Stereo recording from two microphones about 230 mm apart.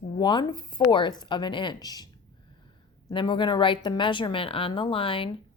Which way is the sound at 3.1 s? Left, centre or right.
Left.